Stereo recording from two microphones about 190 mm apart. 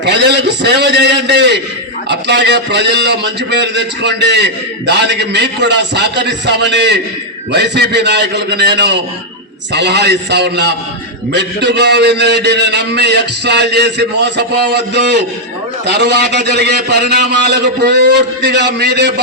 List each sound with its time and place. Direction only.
0.0 s a man's voice: 60° right (ahead or behind)